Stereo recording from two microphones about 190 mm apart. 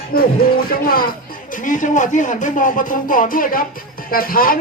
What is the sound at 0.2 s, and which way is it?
Speech, 50° left (ahead or behind).